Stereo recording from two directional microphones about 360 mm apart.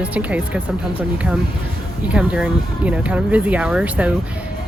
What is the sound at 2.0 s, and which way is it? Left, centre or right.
Speech, centre.